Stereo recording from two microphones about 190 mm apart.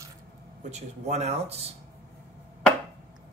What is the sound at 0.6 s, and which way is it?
Speech, 35° right (ahead or behind).